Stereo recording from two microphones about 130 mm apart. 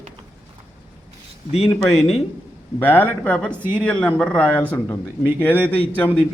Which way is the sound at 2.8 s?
15° left (ahead or behind).